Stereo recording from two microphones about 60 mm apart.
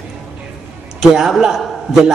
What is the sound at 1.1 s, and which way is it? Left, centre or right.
Speech, centre.